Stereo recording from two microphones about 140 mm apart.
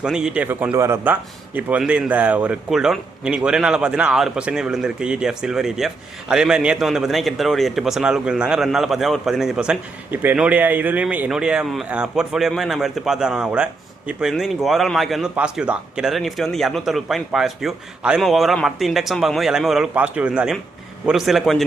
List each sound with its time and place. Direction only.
0.0 s a man's voice: 5° right (ahead or behind)
0.4 s a man's voice: 15° right (ahead or behind); by 21.6 s centre (ahead or behind)